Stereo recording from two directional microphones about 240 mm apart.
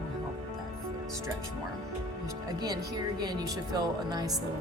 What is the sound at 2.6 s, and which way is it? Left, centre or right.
Speech, centre.